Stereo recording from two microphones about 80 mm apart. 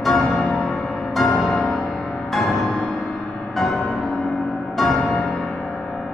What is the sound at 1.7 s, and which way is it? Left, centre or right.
Music, centre.